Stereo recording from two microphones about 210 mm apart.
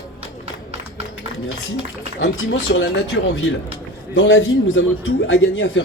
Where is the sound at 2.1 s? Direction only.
70° left (ahead or behind).